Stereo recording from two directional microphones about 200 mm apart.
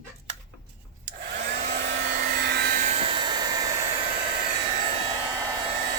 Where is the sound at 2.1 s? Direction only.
50° right (ahead or behind).